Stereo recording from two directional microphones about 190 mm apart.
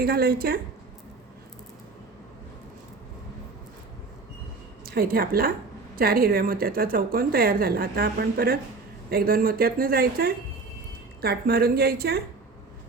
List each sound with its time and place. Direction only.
0.0 s a woman's voice: 55° right (ahead or behind)
4.9 s a woman's voice: 50° right (ahead or behind)